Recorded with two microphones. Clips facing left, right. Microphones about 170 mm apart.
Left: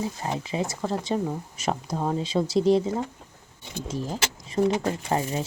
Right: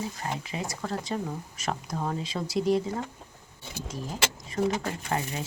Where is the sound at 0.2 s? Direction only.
25° left (ahead or behind).